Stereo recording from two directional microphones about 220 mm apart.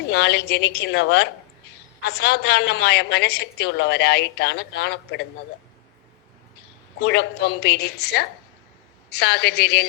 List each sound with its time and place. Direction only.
0.1 s a woman's voice: 50° left (ahead or behind)
7.0 s a woman's voice: 50° left (ahead or behind)